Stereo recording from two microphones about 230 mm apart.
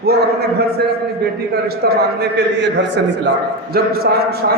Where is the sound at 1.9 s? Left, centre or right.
Right.